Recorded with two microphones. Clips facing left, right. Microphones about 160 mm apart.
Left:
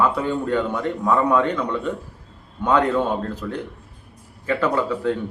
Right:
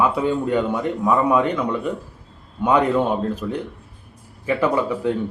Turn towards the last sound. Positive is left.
turn(degrees=-15)  # may be behind; listen again after turning